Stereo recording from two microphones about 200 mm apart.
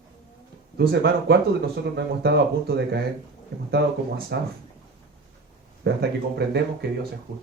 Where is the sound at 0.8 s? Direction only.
55° right (ahead or behind).